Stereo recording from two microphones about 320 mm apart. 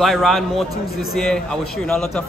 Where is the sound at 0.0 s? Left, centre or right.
Centre.